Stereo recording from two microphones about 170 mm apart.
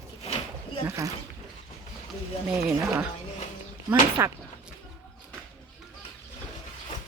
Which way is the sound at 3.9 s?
15° right (ahead or behind).